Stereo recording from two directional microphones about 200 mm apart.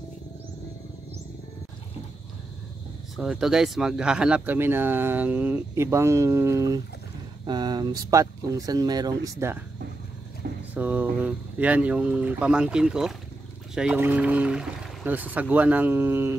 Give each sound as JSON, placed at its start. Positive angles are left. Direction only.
{"t": 3.2, "sound": "speech", "side_deg": 0}
{"t": 10.7, "sound": "speech", "side_deg": -10}